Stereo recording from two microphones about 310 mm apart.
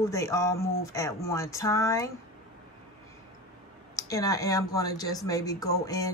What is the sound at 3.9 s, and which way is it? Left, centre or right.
Speech, centre.